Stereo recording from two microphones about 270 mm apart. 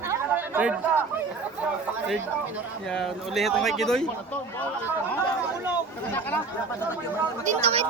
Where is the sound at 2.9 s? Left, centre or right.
Centre.